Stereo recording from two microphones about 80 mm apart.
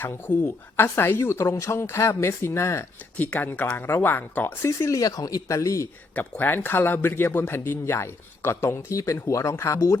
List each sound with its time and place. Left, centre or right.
0.0 s a woman's voice: left
3.2 s speech: centre
4.8 s speech: left
6.1 s a woman's voice: left